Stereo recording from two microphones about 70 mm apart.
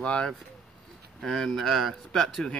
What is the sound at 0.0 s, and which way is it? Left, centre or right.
Speech, centre.